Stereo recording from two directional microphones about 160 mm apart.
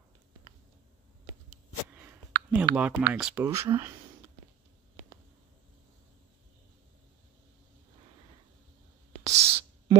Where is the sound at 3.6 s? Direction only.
20° right (ahead or behind).